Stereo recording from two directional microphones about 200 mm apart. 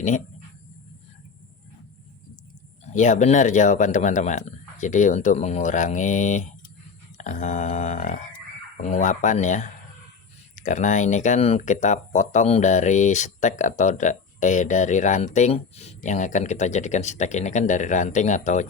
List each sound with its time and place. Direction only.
2.8 s speech: 40° left (ahead or behind)